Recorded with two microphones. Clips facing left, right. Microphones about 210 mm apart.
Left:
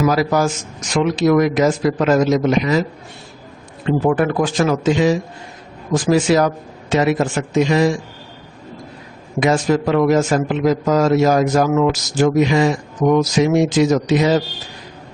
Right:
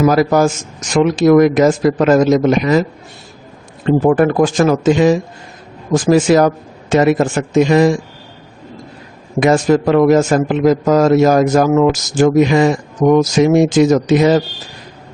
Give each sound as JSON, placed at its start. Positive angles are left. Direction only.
{"t": 0.0, "sound": "a man's voice", "side_deg": -50}
{"t": 3.8, "sound": "a man's voice", "side_deg": -45}
{"t": 9.4, "sound": "a man's voice", "side_deg": -50}